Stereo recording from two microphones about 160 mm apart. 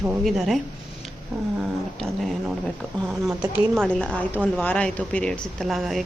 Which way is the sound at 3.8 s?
10° left (ahead or behind).